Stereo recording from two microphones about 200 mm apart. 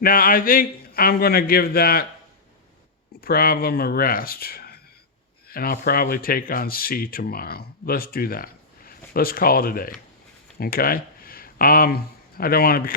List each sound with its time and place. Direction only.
0.0 s speech: 45° left (ahead or behind)
3.2 s speech: 50° left (ahead or behind)